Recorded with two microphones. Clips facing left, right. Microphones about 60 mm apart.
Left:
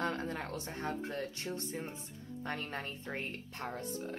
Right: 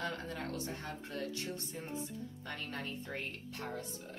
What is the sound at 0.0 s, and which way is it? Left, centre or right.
Speech, left.